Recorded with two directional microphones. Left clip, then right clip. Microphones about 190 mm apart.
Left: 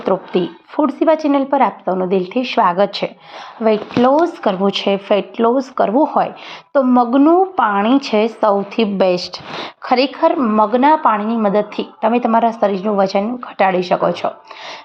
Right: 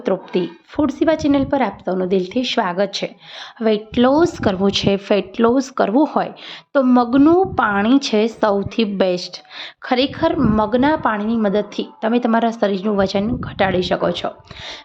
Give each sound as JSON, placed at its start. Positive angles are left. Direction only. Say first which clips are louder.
{"t": 0.0, "sound": "a woman's voice", "louder": "left 3 dB", "side_deg": -5}
{"t": 3.6, "sound": "a woman's voice", "louder": "left 3 dB", "side_deg": -15}
{"t": 4.0, "sound": "speech", "louder": "left 2 dB", "side_deg": -30}